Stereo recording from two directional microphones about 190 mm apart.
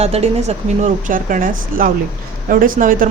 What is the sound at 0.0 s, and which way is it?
Speech, 35° right (ahead or behind).